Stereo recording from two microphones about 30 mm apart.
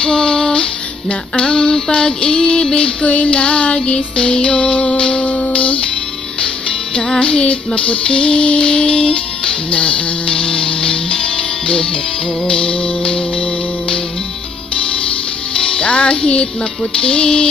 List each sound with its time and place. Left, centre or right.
0.0 s music: left
7.2 s music: left
12.4 s music: left
15.6 s music: left